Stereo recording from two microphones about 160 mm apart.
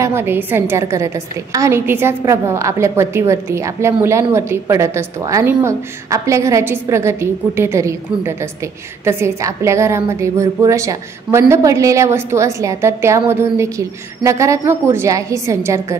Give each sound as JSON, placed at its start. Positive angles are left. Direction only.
{"t": 0.0, "sound": "a woman's voice", "side_deg": -15}